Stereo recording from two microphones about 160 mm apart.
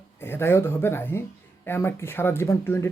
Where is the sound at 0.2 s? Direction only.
15° left (ahead or behind).